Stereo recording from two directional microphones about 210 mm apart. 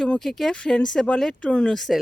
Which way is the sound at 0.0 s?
Centre (ahead or behind).